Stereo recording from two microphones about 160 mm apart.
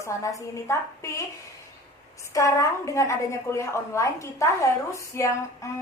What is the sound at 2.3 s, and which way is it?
A woman's voice, 20° left (ahead or behind).